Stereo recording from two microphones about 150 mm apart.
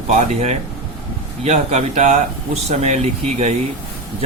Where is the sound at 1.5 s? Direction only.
50° right (ahead or behind).